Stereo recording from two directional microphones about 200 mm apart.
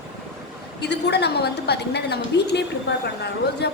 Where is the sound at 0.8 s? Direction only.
55° left (ahead or behind).